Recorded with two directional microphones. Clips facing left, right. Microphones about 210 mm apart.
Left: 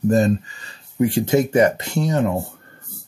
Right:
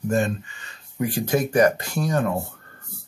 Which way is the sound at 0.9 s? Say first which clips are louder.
Left 6 dB; 25° left (ahead or behind).